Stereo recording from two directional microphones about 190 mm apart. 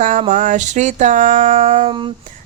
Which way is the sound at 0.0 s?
45° right (ahead or behind).